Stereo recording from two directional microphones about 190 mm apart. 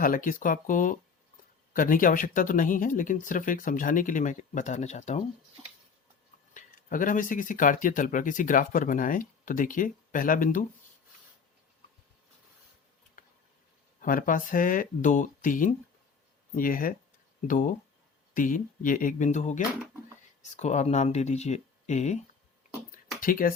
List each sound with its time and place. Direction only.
0.0 s speech: 45° left (ahead or behind)
6.5 s speech: 45° left (ahead or behind)
14.0 s speech: 45° left (ahead or behind)
22.9 s a sound: 45° left (ahead or behind)